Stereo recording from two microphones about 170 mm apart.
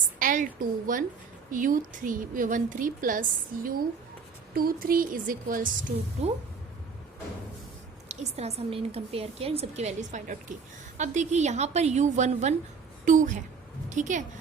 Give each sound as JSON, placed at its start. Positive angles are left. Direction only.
{"t": 0.2, "sound": "a woman's voice", "side_deg": -50}
{"t": 8.0, "sound": "a woman's voice", "side_deg": -40}